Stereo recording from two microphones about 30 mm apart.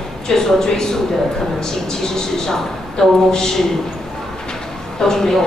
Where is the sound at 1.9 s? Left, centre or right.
Centre.